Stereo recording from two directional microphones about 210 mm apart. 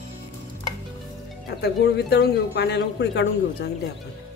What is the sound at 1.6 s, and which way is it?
Speech, 50° left (ahead or behind).